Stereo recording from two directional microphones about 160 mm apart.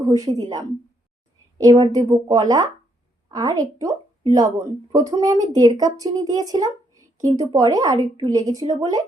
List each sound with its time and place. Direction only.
0.3 s speech: 25° right (ahead or behind)
1.8 s speech: 20° right (ahead or behind)